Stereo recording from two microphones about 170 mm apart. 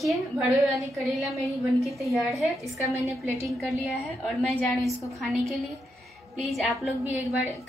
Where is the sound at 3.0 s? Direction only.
15° right (ahead or behind).